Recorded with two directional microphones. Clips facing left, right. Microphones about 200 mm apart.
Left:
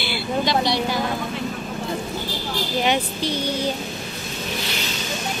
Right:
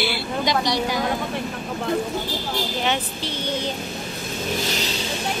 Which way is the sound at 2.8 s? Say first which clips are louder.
Left 3 dB; 15° left (ahead or behind).